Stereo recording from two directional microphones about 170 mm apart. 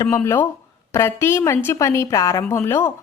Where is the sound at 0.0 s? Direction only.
15° left (ahead or behind).